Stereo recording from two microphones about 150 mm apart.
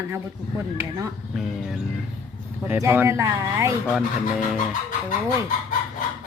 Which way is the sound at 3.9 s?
5° right (ahead or behind).